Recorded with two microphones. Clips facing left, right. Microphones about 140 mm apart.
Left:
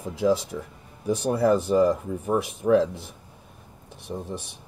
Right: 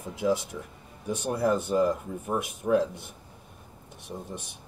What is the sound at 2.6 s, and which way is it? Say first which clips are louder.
Speech: left 4 dB; 90° left.